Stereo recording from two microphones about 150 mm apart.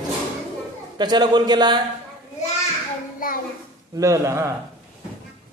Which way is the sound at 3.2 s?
65° left (ahead or behind).